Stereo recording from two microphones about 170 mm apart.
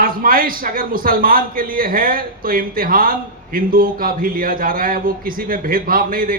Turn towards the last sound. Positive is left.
turn(degrees=-55)  # may be behind; listen again after turning